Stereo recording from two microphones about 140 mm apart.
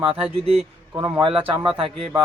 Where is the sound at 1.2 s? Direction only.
40° right (ahead or behind).